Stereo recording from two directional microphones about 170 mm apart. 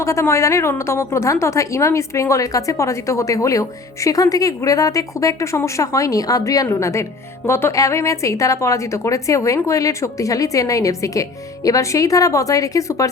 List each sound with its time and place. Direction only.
0.0 s a woman's voice: 15° left (ahead or behind)